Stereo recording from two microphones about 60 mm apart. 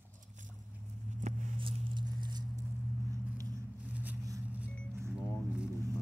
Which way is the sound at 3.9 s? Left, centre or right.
Right.